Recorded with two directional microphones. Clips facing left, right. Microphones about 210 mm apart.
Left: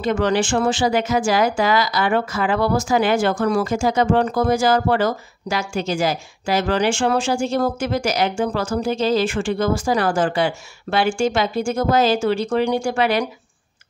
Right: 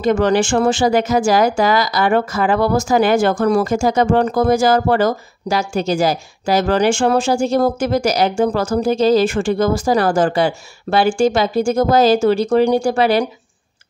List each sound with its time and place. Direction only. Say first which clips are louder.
0.0 s speech: right 4 dB; 45° right (ahead or behind)